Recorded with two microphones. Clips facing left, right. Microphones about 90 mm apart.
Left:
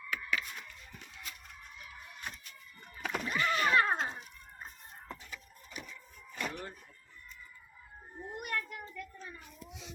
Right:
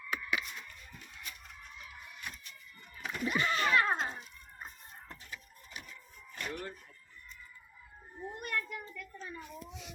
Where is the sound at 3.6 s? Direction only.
30° left (ahead or behind).